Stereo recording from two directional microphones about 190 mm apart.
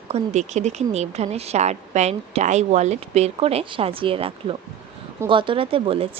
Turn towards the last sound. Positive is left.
turn(degrees=-30)  # may be behind; listen again after turning